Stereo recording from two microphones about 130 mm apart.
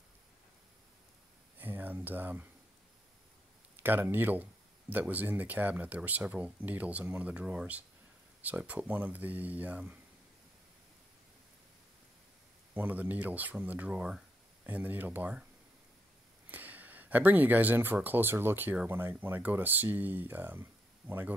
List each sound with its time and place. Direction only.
1.6 s a sound: 15° right (ahead or behind)
3.8 s speech: 15° right (ahead or behind)
12.7 s speech: 15° right (ahead or behind)
16.4 s speech: 15° right (ahead or behind)